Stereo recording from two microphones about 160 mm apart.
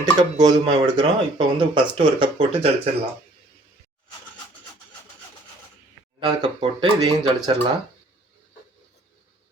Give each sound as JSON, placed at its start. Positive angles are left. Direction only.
{"t": 0.0, "sound": "speech", "side_deg": -25}
{"t": 6.1, "sound": "speech", "side_deg": -35}